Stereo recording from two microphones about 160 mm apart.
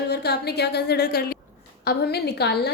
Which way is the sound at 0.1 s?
90° left.